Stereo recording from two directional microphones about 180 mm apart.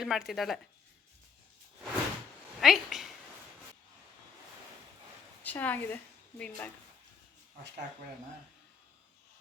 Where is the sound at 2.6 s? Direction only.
Centre (ahead or behind).